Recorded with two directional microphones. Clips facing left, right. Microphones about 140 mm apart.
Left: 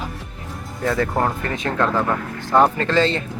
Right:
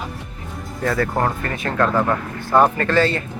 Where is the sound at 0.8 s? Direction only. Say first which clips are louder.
Even; 20° left (ahead or behind).